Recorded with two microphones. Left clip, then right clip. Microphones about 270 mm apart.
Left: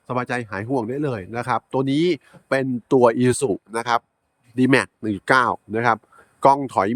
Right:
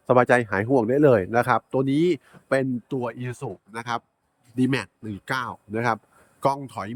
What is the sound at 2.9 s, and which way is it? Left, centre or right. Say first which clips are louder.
Speech: left 14 dB; centre.